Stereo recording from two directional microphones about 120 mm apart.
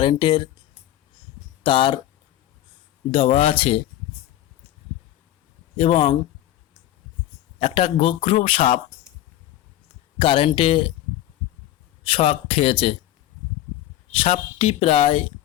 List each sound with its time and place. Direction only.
0.0 s a man's voice: 45° left (ahead or behind)
1.6 s a man's voice: 45° left (ahead or behind)
3.1 s a man's voice: 50° left (ahead or behind)
5.7 s a man's voice: 50° left (ahead or behind)
7.6 s a man's voice: 50° left (ahead or behind)
10.2 s a man's voice: 45° left (ahead or behind)
12.0 s a man's voice: 50° left (ahead or behind)
14.3 s a man's voice: 55° left (ahead or behind)